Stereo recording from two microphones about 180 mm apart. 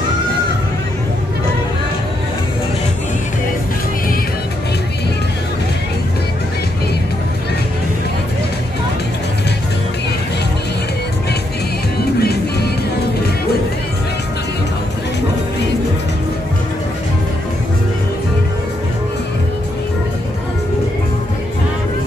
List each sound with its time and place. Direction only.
12.2 s music: 65° left (ahead or behind)